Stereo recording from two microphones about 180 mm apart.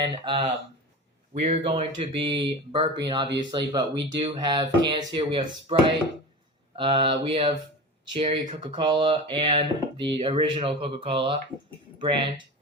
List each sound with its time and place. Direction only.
0.0 s speech: 30° right (ahead or behind)
6.7 s speech: 30° right (ahead or behind)